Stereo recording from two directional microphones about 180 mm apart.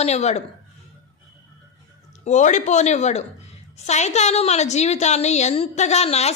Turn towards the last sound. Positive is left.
turn(degrees=35)  # may be behind; listen again after turning